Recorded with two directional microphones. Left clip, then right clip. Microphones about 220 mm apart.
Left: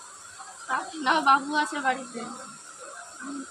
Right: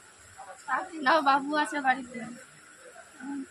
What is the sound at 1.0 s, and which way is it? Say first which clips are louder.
Speech: left 2 dB; 10° right (ahead or behind).